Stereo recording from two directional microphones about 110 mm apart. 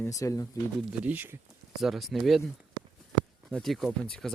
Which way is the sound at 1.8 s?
Centre (ahead or behind).